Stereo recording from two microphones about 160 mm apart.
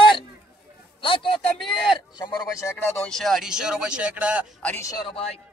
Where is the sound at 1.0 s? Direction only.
30° left (ahead or behind).